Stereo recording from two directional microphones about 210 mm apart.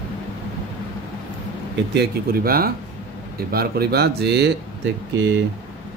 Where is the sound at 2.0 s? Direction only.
45° right (ahead or behind).